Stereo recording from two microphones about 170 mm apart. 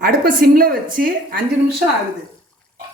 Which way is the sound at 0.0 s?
60° right (ahead or behind).